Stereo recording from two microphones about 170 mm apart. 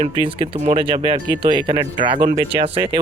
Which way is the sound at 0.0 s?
35° right (ahead or behind).